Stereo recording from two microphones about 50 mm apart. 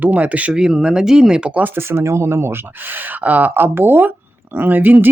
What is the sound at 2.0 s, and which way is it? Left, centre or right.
Speech, right.